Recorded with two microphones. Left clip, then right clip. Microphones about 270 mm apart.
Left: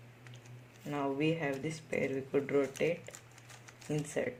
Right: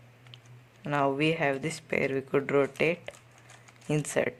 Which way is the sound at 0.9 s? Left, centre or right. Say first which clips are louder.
Right 7 dB; right.